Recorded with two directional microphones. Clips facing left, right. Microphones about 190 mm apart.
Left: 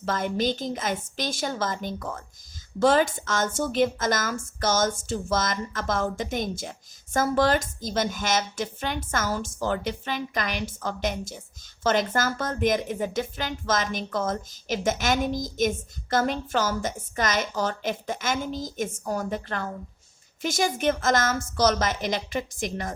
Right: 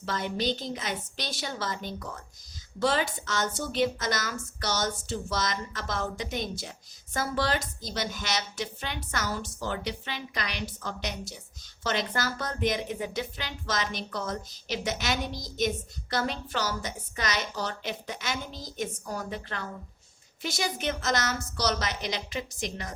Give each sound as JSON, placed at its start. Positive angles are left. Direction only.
{"t": 0.0, "sound": "a woman's voice", "side_deg": 50}